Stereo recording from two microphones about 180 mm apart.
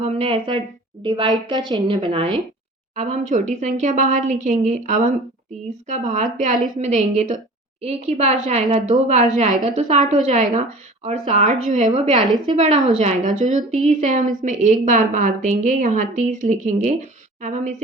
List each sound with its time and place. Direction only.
0.0 s a woman's voice: 30° right (ahead or behind)
2.9 s a woman's voice: 40° right (ahead or behind)